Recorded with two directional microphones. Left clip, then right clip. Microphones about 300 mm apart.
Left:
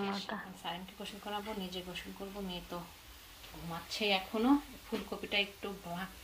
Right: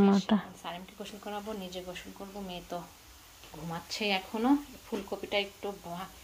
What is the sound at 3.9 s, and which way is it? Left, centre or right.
Speech, centre.